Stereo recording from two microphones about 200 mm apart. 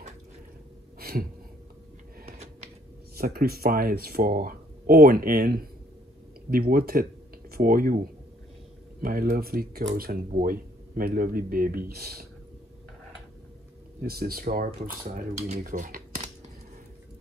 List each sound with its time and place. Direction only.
0.9 s a sound: 50° right (ahead or behind)
3.2 s speech: 50° right (ahead or behind)
14.0 s speech: 50° right (ahead or behind)
15.1 s speech: 40° right (ahead or behind)